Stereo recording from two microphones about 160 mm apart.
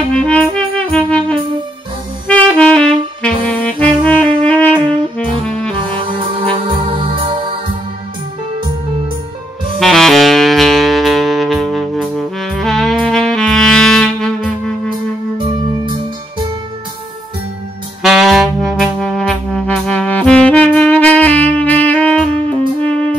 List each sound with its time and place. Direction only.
0.1 s music: 5° left (ahead or behind)
2.2 s saxophone: 5° left (ahead or behind)
5.8 s music: 30° right (ahead or behind)
9.8 s saxophone: centre (ahead or behind)
15.3 s music: 30° right (ahead or behind)
18.0 s music: centre (ahead or behind)